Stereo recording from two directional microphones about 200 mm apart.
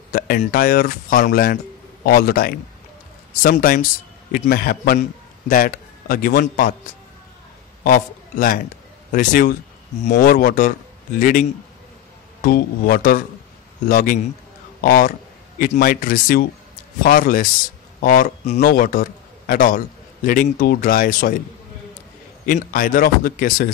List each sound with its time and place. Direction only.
0.1 s a man's voice: 45° left (ahead or behind)
7.8 s a man's voice: 45° left (ahead or behind)
12.4 s a man's voice: 45° left (ahead or behind)
22.5 s a man's voice: 45° left (ahead or behind)